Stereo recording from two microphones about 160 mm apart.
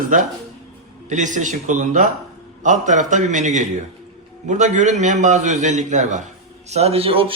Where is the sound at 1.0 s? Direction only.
50° right (ahead or behind).